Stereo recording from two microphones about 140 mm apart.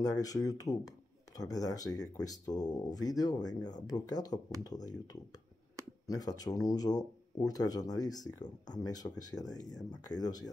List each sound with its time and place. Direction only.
0.0 s speech: 25° left (ahead or behind)
6.0 s speech: 25° left (ahead or behind)